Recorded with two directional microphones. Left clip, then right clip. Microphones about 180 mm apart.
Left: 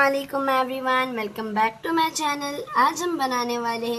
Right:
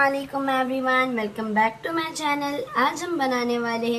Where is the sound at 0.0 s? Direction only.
45° left (ahead or behind).